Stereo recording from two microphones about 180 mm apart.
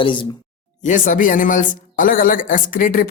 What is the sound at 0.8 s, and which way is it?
Speech, 45° left (ahead or behind).